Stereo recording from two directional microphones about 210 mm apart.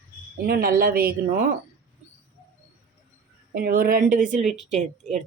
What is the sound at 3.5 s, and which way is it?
Speech, 45° right (ahead or behind).